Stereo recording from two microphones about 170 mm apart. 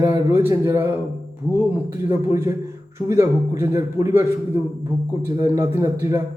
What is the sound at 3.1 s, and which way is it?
A man's voice, 15° right (ahead or behind).